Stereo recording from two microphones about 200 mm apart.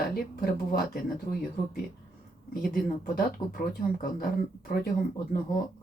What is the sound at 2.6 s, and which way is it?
Speech, 45° left (ahead or behind).